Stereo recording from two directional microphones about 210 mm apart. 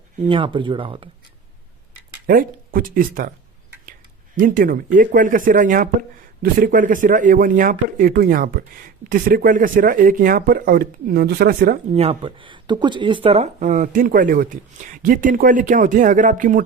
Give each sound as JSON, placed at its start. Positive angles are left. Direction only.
{"t": 0.3, "sound": "speech", "side_deg": -25}
{"t": 2.2, "sound": "speech", "side_deg": -45}
{"t": 4.4, "sound": "speech", "side_deg": -40}
{"t": 11.9, "sound": "speech", "side_deg": -25}